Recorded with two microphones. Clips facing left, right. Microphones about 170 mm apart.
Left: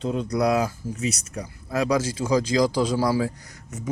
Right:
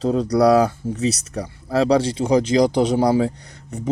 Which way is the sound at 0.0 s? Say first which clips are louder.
Right 7 dB; 35° right (ahead or behind).